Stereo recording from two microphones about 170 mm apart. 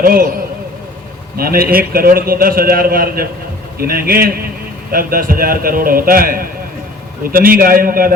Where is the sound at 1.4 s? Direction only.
60° right (ahead or behind).